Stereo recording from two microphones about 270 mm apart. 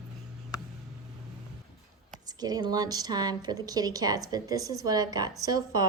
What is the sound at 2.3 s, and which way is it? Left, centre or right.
Speech, centre.